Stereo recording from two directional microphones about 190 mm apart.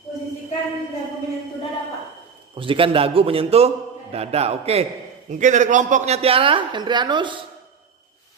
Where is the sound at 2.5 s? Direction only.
25° right (ahead or behind).